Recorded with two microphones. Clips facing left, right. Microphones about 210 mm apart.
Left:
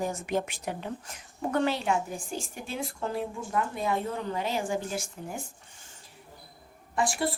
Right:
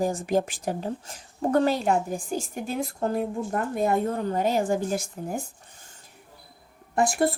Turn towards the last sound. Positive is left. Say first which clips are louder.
# right 6 dB
turn(degrees=-50)  # may be behind; listen again after turning